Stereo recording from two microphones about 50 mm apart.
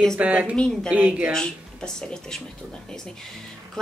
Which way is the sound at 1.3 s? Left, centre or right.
Centre.